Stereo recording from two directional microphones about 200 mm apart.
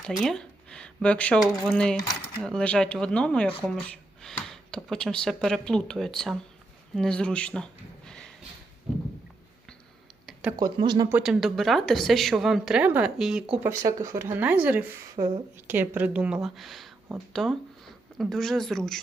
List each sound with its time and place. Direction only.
0.0 s a woman's voice: centre (ahead or behind)
10.6 s speech: 20° right (ahead or behind)
11.1 s a woman's voice: 5° right (ahead or behind)